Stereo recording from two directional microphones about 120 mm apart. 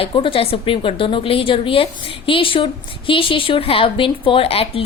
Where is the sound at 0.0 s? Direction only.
50° left (ahead or behind).